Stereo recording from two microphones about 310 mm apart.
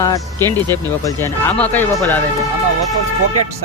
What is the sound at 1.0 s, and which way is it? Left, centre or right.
Speech, centre.